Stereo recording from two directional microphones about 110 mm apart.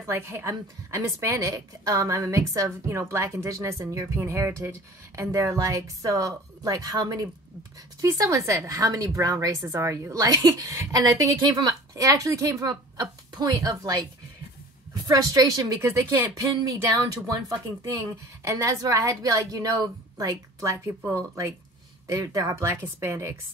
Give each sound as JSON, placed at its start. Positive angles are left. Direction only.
{"t": 0.0, "sound": "a woman's voice", "side_deg": -25}
{"t": 17.3, "sound": "a woman's voice", "side_deg": -30}